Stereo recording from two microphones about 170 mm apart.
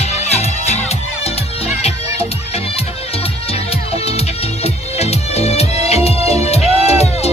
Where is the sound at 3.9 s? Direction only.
35° left (ahead or behind).